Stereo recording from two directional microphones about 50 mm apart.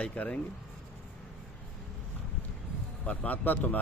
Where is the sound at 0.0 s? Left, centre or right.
Left.